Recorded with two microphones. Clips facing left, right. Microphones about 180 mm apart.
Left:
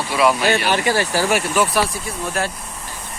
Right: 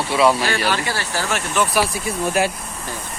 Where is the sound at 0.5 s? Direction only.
15° left (ahead or behind).